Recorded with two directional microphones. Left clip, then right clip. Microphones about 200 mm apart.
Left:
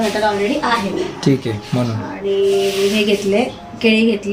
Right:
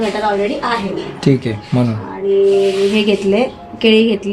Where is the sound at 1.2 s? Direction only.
20° right (ahead or behind).